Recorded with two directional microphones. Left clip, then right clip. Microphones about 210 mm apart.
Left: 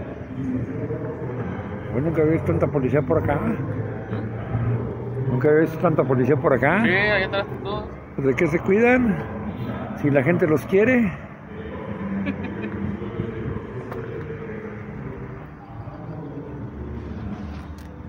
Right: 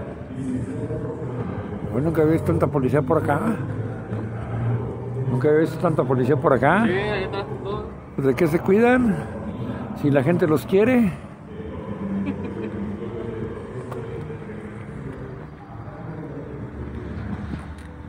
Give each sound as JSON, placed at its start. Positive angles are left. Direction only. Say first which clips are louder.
{"t": 2.0, "sound": "a man's voice", "louder": "right 1 dB", "side_deg": -10}
{"t": 5.4, "sound": "speech", "louder": "left 1 dB", "side_deg": 0}
{"t": 6.9, "sound": "a sound", "louder": "left 5 dB", "side_deg": 35}
{"t": 8.2, "sound": "a man's voice", "louder": "right 1 dB", "side_deg": -10}
{"t": 10.0, "sound": "a man's voice", "louder": "even", "side_deg": -10}